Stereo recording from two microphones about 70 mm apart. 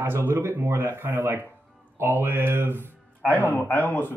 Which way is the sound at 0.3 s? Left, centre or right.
Right.